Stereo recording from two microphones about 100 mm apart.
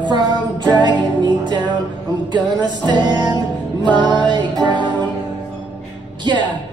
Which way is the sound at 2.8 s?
50° right (ahead or behind).